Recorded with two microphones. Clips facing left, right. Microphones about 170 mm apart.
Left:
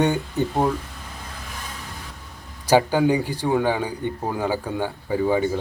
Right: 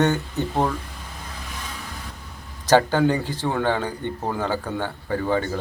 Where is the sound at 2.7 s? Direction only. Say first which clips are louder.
Even; 10° left (ahead or behind).